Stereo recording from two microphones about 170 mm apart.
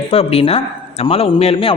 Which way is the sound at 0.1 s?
35° left (ahead or behind).